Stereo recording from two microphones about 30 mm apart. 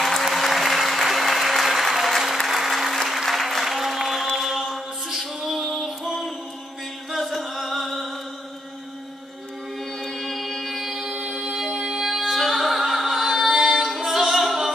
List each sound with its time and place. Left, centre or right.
0.0 s applause: centre
3.6 s music: centre
4.4 s mantra: centre
5.7 s music: centre
7.1 s chant: centre
10.1 s music: centre
12.0 s music: centre
13.9 s a capella: centre